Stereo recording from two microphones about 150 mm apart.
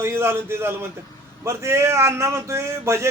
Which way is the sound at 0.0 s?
15° right (ahead or behind).